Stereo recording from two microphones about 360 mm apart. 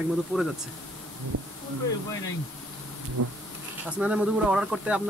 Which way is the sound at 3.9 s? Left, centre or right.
Centre.